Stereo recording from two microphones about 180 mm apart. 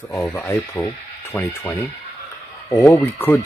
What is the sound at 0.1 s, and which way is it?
Speech, 10° left (ahead or behind).